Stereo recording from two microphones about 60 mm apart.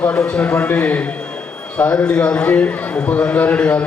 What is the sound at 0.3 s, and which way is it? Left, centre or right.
A man's voice, centre.